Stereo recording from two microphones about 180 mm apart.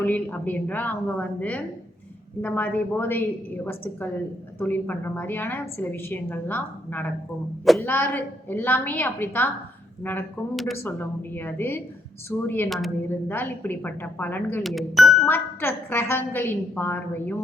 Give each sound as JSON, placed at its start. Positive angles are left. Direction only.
{"t": 0.0, "sound": "a woman's voice", "side_deg": 10}
{"t": 10.5, "sound": "speech", "side_deg": 0}
{"t": 11.3, "sound": "a woman's voice", "side_deg": 10}
{"t": 14.6, "sound": "speech", "side_deg": 0}
{"t": 15.3, "sound": "a woman's voice", "side_deg": 10}